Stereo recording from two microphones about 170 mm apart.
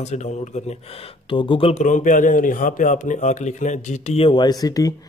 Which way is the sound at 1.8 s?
50° left (ahead or behind).